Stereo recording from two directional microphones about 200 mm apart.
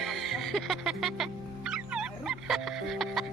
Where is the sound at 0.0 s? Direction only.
Centre (ahead or behind).